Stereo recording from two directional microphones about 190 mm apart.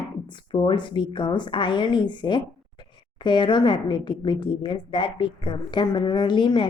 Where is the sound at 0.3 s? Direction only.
25° left (ahead or behind).